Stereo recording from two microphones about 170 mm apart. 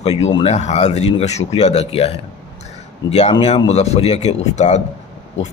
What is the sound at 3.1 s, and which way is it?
Speech, 40° left (ahead or behind).